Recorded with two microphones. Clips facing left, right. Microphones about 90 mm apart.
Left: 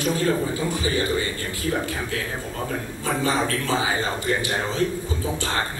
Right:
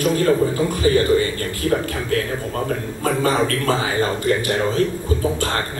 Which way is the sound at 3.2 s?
50° right (ahead or behind).